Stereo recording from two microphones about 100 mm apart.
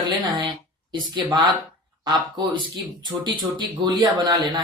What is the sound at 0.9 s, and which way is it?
Speech, 50° right (ahead or behind).